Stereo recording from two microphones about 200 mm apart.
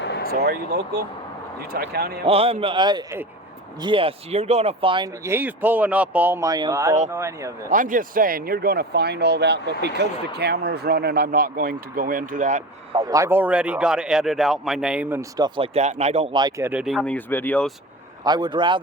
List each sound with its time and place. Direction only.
0.0 s a sound: 60° left (ahead or behind)
0.4 s speech: 55° right (ahead or behind)
2.2 s speech: 30° right (ahead or behind)
5.2 s speech: 10° right (ahead or behind)
7.7 s speech: 40° right (ahead or behind)
13.0 s speech: 15° right (ahead or behind)
15.4 s speech: 25° right (ahead or behind); by 17.7 s 5° left (ahead or behind)
18.3 s speech: 20° right (ahead or behind)